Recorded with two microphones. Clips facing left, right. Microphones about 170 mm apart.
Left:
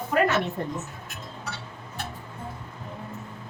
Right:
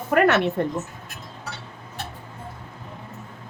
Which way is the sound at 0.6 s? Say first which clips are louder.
Right 6 dB; 75° right (ahead or behind).